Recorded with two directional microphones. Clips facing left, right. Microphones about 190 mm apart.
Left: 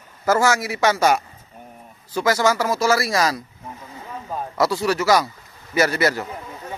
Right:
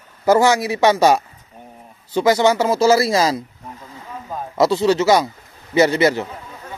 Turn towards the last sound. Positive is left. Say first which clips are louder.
# right 5 dB
turn(degrees=-20)  # may be behind; listen again after turning